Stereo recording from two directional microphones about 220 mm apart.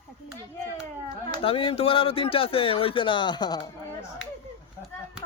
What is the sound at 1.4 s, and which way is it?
Speech, 25° left (ahead or behind).